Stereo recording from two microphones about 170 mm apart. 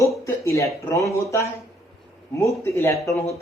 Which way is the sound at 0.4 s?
15° left (ahead or behind).